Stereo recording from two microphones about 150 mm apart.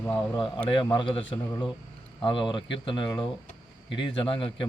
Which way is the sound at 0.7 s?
35° left (ahead or behind).